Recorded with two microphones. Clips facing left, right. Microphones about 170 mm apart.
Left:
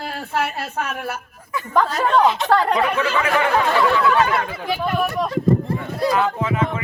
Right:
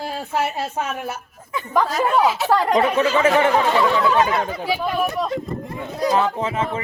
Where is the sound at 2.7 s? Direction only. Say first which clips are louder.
Right 3 dB; 35° right (ahead or behind).